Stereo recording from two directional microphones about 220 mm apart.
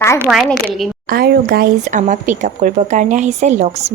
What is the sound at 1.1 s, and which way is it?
A woman's voice, 45° right (ahead or behind).